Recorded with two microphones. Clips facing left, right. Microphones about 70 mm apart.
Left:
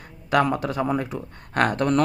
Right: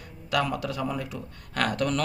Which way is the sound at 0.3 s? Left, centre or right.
Left.